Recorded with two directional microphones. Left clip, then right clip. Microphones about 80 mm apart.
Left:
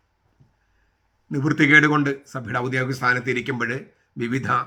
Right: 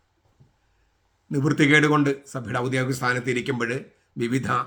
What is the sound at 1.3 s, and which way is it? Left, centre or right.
Speech, right.